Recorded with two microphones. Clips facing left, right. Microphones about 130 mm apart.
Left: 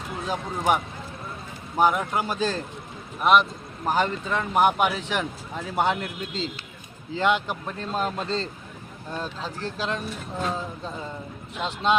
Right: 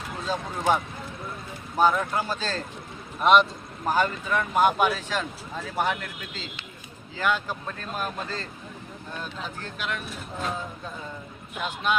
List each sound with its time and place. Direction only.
0.3 s a man's voice: 15° left (ahead or behind)
3.8 s speech: 20° left (ahead or behind)
11.6 s speech: 25° left (ahead or behind)